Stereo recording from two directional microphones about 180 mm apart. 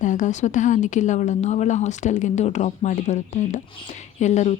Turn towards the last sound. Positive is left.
turn(degrees=40)  # may be behind; listen again after turning